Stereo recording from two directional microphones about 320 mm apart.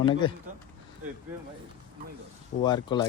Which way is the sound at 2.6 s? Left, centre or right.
Centre.